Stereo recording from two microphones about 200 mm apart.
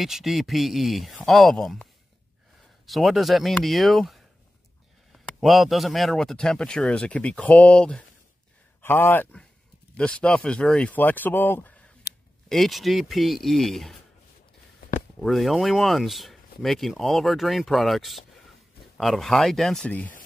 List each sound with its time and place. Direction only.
0.0 s speech: centre (ahead or behind)
2.9 s speech: centre (ahead or behind)
5.4 s speech: centre (ahead or behind)
12.1 s a sound: 50° left (ahead or behind)
12.4 s speech: centre (ahead or behind)
15.1 s speech: centre (ahead or behind)